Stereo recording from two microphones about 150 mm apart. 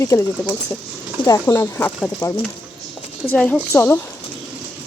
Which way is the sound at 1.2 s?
20° left (ahead or behind).